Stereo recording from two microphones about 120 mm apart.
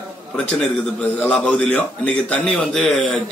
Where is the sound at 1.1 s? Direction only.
10° left (ahead or behind).